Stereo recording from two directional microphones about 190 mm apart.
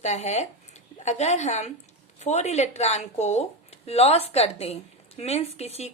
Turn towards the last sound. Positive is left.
turn(degrees=35)  # may be behind; listen again after turning